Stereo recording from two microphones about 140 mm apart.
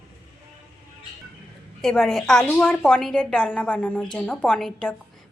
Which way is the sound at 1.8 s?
5° left (ahead or behind).